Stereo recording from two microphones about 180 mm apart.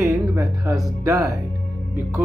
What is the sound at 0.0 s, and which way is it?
Music, 15° right (ahead or behind).